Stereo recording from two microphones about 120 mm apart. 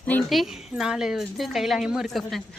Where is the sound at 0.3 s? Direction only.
Centre (ahead or behind).